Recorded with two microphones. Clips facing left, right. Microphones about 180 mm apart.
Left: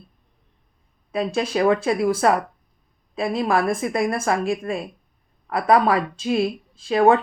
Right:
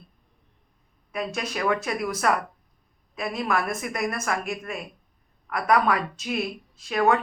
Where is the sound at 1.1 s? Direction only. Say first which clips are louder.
Left 8 dB; 30° left (ahead or behind).